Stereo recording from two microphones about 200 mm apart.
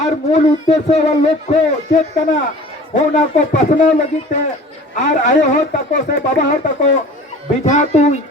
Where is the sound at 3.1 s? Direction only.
40° left (ahead or behind).